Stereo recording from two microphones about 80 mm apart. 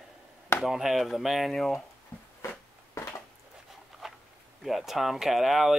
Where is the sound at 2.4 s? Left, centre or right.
Left.